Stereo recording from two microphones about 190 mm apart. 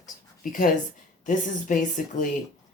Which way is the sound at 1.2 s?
40° left (ahead or behind).